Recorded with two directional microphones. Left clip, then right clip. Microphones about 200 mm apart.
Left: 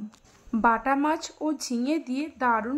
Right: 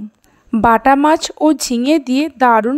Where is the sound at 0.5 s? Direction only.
40° right (ahead or behind).